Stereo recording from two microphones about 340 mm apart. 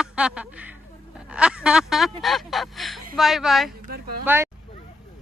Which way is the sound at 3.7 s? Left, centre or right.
Right.